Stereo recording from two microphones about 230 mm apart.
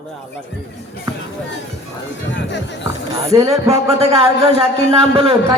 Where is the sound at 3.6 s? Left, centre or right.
Right.